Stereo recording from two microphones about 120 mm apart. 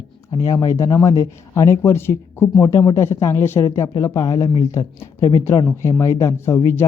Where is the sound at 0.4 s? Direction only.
30° left (ahead or behind).